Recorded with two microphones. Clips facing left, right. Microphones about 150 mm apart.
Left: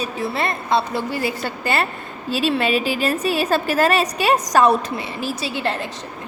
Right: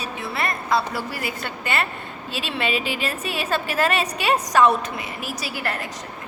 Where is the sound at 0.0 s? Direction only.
30° left (ahead or behind).